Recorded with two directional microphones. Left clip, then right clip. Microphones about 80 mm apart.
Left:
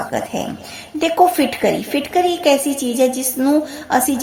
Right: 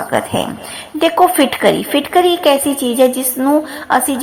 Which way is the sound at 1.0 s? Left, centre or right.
Left.